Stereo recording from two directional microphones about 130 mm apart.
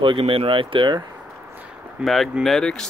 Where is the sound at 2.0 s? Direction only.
Centre (ahead or behind).